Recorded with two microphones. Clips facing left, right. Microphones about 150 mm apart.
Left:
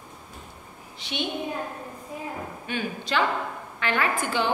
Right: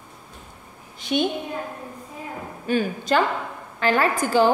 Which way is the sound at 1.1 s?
45° right (ahead or behind).